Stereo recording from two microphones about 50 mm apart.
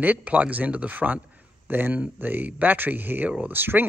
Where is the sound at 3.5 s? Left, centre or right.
Right.